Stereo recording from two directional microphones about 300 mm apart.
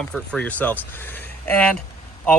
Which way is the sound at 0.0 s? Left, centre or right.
Centre.